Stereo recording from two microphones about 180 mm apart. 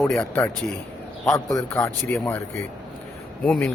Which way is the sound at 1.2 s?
15° left (ahead or behind).